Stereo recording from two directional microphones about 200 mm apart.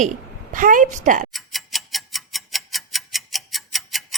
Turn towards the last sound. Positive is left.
turn(degrees=0)  # may be behind; listen again after turning